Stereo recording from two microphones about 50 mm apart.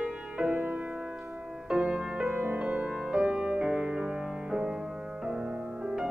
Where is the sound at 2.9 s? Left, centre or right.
Centre.